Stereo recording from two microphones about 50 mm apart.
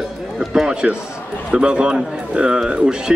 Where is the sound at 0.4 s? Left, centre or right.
Centre.